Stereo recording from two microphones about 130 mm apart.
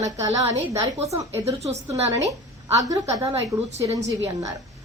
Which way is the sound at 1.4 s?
55° right (ahead or behind).